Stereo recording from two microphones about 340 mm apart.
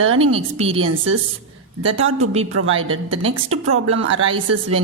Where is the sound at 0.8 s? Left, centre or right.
Right.